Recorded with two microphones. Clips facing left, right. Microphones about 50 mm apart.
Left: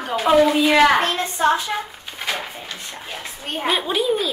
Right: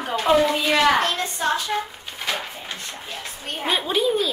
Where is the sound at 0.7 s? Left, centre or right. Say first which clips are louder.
Left 1 dB; left.